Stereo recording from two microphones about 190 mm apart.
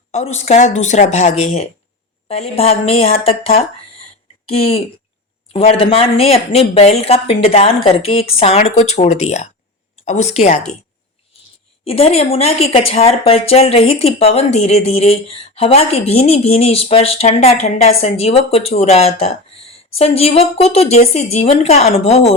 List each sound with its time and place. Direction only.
0.1 s a woman's voice: 35° left (ahead or behind)
11.9 s a woman's voice: 30° left (ahead or behind)